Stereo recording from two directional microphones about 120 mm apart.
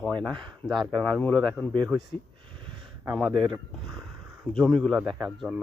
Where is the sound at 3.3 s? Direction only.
45° right (ahead or behind).